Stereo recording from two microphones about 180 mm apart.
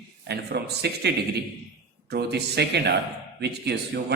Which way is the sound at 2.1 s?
65° right (ahead or behind).